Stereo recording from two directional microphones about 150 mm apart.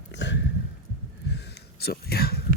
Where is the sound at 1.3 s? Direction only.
90° left.